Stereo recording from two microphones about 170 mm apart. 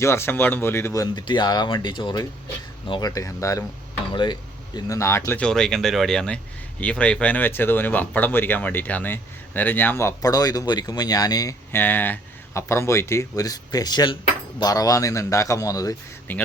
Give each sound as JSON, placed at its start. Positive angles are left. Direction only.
{"t": 0.0, "sound": "speech", "side_deg": 15}
{"t": 1.1, "sound": "a man's voice", "side_deg": 25}
{"t": 4.9, "sound": "a man's voice", "side_deg": 15}